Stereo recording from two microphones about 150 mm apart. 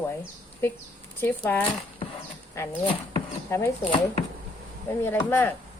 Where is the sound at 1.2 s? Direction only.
10° left (ahead or behind).